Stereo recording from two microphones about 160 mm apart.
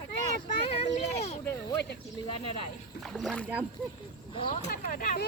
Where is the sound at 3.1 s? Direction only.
5° left (ahead or behind).